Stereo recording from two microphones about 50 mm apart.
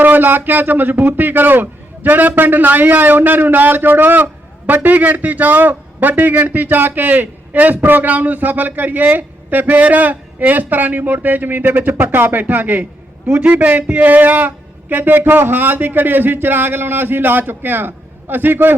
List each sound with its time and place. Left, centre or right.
0.0 s a man's voice: right